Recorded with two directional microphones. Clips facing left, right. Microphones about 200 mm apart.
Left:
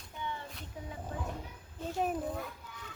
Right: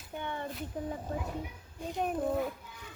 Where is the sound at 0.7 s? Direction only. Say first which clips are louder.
Right 8 dB; 50° right (ahead or behind).